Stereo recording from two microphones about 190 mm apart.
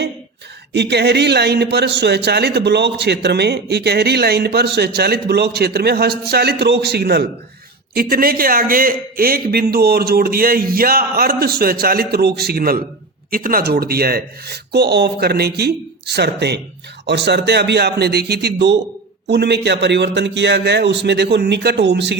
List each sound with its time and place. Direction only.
0.7 s a man's voice: 60° right (ahead or behind)